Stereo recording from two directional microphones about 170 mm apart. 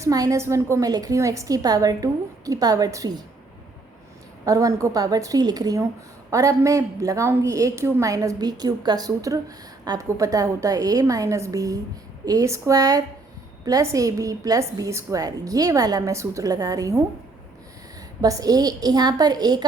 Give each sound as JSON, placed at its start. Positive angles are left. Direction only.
{"t": 0.0, "sound": "a woman's voice", "side_deg": -20}
{"t": 4.4, "sound": "a woman's voice", "side_deg": -20}
{"t": 18.2, "sound": "a woman's voice", "side_deg": -20}